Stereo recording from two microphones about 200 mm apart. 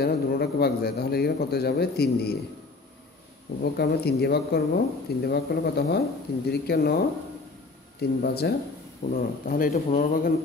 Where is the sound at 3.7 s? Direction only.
55° left (ahead or behind).